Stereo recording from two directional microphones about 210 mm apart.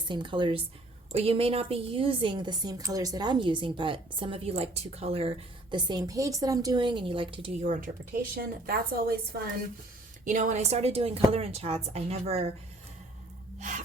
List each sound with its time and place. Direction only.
0.0 s a woman's voice: 20° right (ahead or behind)
8.4 s a woman's voice: 45° right (ahead or behind)
10.2 s a woman's voice: 35° right (ahead or behind)
13.6 s a woman's voice: 35° right (ahead or behind)